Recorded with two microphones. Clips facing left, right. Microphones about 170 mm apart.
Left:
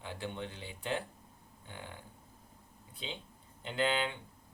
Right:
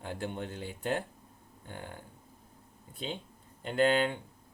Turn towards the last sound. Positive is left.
turn(degrees=-45)  # may be behind; listen again after turning